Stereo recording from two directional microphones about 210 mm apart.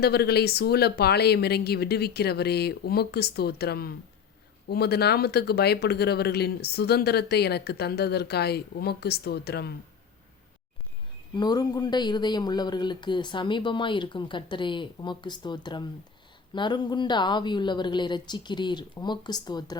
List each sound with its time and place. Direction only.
0.0 s speech: 50° left (ahead or behind)
11.3 s speech: 20° left (ahead or behind)